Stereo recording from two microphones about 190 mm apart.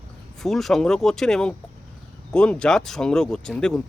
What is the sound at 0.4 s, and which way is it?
Speech, centre (ahead or behind).